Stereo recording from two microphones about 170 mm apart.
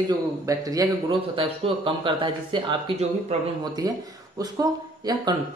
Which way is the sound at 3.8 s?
20° right (ahead or behind).